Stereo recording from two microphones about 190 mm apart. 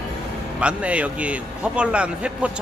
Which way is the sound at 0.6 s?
5° right (ahead or behind).